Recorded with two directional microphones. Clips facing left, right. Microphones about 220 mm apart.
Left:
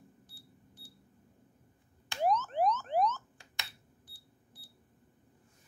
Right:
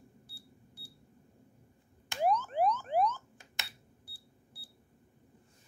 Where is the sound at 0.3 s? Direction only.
10° right (ahead or behind).